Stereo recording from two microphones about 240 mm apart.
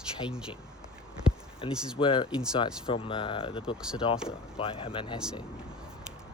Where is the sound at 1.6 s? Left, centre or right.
Left.